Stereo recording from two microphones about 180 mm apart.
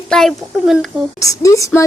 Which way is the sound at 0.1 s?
Centre (ahead or behind).